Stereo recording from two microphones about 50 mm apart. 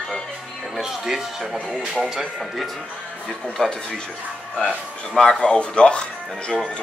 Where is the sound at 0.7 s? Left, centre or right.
Centre.